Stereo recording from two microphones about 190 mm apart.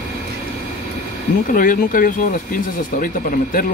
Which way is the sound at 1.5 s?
45° left (ahead or behind).